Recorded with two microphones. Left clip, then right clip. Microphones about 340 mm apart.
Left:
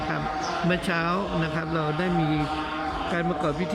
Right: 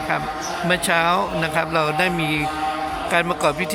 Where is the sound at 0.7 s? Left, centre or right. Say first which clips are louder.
Right 10 dB; centre.